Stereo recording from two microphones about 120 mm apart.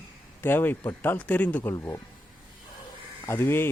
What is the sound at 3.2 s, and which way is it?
Speech, 20° left (ahead or behind).